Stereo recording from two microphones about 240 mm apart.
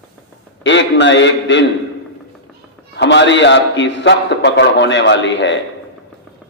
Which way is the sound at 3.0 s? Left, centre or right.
Left.